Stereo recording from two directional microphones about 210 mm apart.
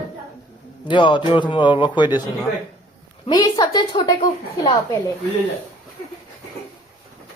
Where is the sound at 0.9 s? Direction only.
20° left (ahead or behind).